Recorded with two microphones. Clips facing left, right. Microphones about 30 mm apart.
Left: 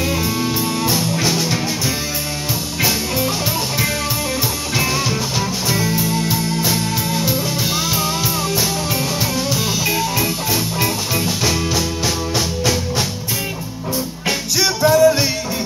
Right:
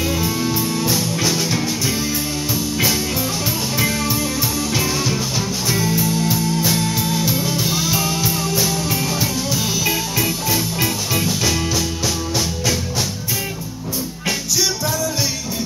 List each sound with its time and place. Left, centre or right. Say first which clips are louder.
0.0 s music: left 1 dB; centre
0.9 s music: left 1 dB; left
5.7 s music: right 1 dB; left
6.7 s music: even; centre
14.6 s music: left 12 dB; left